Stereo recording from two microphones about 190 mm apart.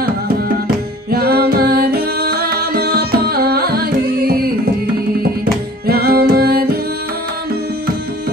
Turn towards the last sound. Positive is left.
turn(degrees=-55)  # may be behind; listen again after turning